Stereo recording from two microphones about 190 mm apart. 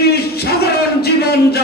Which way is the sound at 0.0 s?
55° left (ahead or behind).